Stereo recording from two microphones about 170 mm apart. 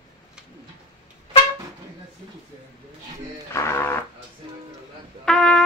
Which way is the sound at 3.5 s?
15° left (ahead or behind).